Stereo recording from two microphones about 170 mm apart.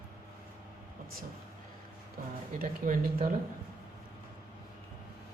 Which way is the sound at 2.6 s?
55° right (ahead or behind).